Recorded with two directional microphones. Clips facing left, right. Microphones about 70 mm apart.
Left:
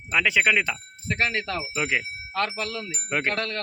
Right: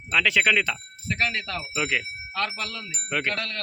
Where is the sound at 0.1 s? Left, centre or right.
Centre.